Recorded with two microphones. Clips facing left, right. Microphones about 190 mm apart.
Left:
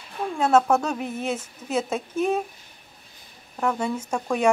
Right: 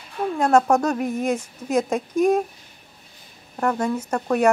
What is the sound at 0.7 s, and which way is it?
Speech, 10° right (ahead or behind).